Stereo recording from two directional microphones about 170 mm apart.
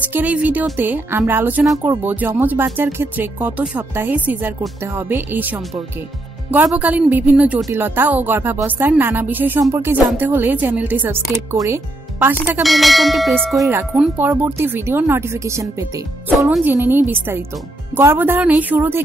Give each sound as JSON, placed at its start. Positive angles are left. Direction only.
{"t": 0.1, "sound": "a woman's voice", "side_deg": -10}
{"t": 12.6, "sound": "bell", "side_deg": 0}
{"t": 13.7, "sound": "a woman's voice", "side_deg": -15}